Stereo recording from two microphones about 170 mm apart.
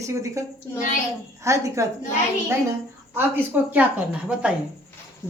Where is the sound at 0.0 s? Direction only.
20° right (ahead or behind).